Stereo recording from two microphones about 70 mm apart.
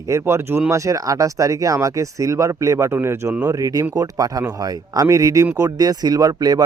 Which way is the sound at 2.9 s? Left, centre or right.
Right.